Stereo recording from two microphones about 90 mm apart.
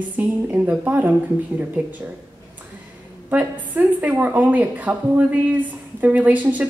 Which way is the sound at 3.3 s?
20° right (ahead or behind).